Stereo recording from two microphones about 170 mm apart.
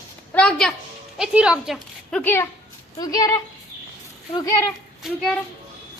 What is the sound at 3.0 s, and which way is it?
Speech, 20° left (ahead or behind).